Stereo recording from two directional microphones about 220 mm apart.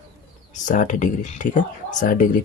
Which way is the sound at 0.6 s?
35° left (ahead or behind).